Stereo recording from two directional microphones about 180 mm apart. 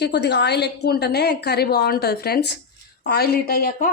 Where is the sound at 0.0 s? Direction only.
70° left (ahead or behind).